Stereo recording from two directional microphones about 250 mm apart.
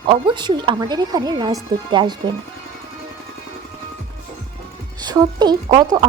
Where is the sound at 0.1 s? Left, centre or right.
Centre.